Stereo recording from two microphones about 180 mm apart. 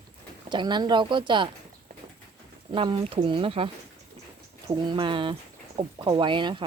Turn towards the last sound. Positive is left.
turn(degrees=-25)  # may be behind; listen again after turning